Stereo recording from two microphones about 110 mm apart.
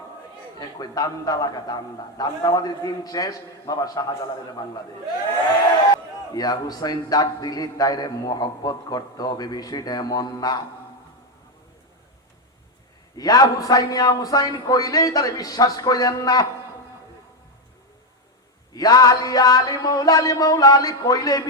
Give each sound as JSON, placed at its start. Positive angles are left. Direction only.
{"t": 0.8, "sound": "a man's voice", "side_deg": 35}
{"t": 6.3, "sound": "a man's voice", "side_deg": 35}
{"t": 13.1, "sound": "a man's voice", "side_deg": 35}
{"t": 18.7, "sound": "a man's voice", "side_deg": 35}